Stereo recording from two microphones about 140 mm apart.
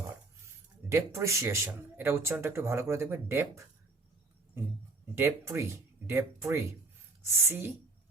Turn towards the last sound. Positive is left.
turn(degrees=-15)  # may be behind; listen again after turning